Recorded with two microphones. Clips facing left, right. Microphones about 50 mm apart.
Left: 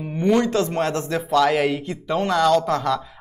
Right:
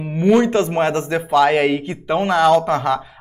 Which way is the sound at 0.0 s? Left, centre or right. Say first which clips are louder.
Right 4 dB; right.